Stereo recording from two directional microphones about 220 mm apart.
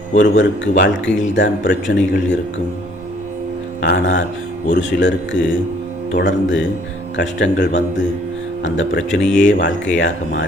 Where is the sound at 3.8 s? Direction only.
55° left (ahead or behind).